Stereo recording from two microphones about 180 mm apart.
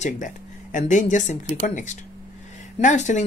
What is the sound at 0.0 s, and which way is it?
Speech, 45° left (ahead or behind).